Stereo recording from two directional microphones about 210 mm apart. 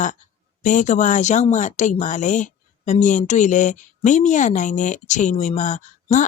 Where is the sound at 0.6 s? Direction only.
35° left (ahead or behind).